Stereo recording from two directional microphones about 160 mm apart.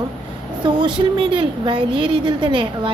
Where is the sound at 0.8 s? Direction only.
30° right (ahead or behind).